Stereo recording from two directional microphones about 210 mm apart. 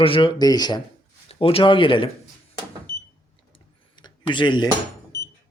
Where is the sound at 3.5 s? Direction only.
20° left (ahead or behind).